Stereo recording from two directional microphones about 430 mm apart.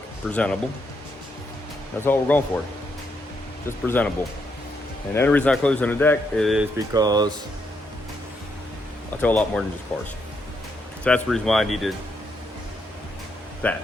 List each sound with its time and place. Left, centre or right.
0.3 s speech: centre
2.0 s speech: centre
3.7 s speech: centre
9.2 s speech: centre
13.6 s speech: centre